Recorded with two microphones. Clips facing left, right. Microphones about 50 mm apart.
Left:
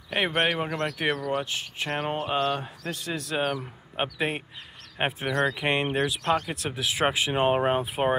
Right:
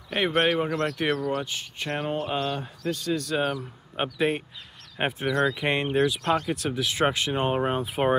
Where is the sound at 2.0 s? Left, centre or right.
Centre.